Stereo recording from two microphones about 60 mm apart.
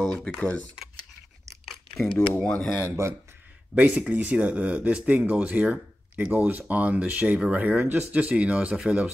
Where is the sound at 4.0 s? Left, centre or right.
Right.